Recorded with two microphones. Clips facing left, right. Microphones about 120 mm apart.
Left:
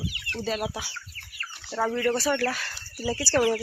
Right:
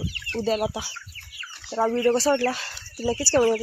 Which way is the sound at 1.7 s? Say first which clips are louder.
Right 4 dB; 25° right (ahead or behind).